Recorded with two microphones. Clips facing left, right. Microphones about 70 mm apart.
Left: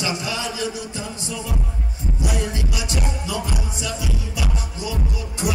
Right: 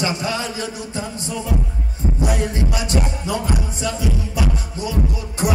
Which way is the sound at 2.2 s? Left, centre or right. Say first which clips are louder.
Right 3 dB; right.